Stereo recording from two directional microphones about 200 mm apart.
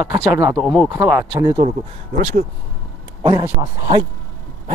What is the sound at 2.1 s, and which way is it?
Speech, 40° right (ahead or behind).